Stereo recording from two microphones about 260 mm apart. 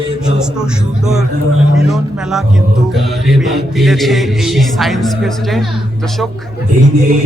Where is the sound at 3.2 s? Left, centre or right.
Centre.